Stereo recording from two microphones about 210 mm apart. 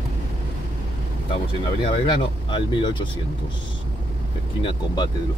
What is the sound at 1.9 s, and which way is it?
Speech, 20° left (ahead or behind).